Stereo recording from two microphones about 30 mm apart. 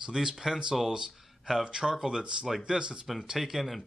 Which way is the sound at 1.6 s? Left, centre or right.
Right.